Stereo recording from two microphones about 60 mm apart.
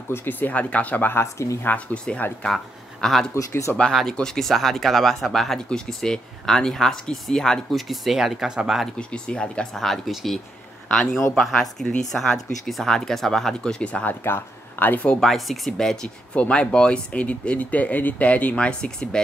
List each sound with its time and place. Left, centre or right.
0.1 s speech: left
1.1 s speech: left
1.6 s speech: left
2.4 s speech: centre
3.3 s speech: left
3.9 s speech: centre
7.7 s speech: centre
8.9 s speech: centre
9.8 s speech: centre
10.9 s speech: centre
11.3 s speech: centre
14.0 s speech: left
15.1 s speech: centre